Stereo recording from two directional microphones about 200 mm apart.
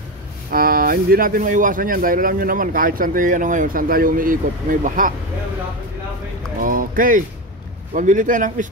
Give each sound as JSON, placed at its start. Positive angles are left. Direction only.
{"t": 0.5, "sound": "speech", "side_deg": -45}
{"t": 6.6, "sound": "a man's voice", "side_deg": -45}